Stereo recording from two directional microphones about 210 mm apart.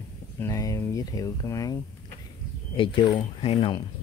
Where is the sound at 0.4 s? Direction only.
15° left (ahead or behind).